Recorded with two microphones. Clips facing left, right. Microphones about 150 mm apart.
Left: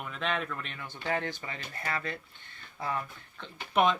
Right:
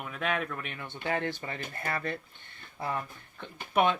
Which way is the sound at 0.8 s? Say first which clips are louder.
Right 2 dB; 55° right (ahead or behind).